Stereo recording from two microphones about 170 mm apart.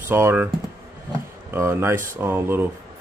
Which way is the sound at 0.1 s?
15° right (ahead or behind).